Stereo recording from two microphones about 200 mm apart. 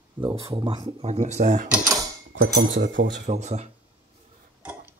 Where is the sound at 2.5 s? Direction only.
55° right (ahead or behind).